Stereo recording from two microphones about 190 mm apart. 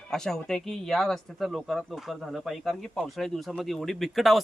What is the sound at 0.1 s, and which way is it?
Speech, 5° left (ahead or behind).